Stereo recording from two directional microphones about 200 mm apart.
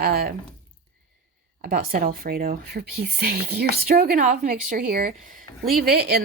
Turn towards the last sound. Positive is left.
turn(degrees=-50)  # may be behind; listen again after turning